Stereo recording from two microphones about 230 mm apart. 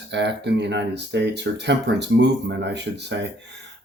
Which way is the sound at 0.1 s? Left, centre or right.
Right.